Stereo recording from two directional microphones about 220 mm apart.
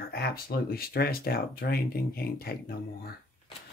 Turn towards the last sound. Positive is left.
turn(degrees=45)  # may be behind; listen again after turning